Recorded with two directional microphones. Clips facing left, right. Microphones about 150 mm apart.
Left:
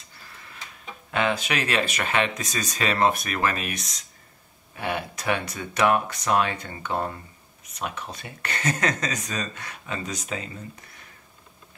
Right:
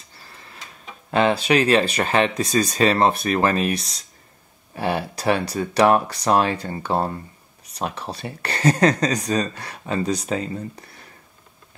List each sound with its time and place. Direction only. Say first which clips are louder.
1.1 s speech: right 7 dB; 35° right (ahead or behind)